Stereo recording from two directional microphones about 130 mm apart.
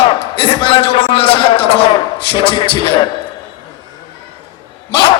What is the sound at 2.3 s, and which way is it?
Speech, 45° left (ahead or behind).